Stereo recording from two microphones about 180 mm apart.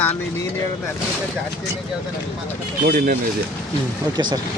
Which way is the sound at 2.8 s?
55° right (ahead or behind).